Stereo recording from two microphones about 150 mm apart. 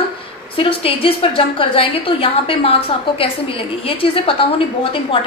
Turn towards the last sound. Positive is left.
turn(degrees=35)  # may be behind; listen again after turning